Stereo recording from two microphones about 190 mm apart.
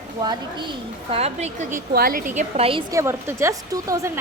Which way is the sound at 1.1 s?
35° right (ahead or behind).